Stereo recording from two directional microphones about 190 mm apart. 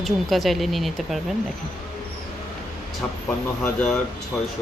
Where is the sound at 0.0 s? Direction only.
Centre (ahead or behind).